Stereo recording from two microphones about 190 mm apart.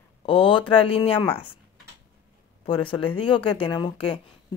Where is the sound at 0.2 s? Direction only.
25° left (ahead or behind).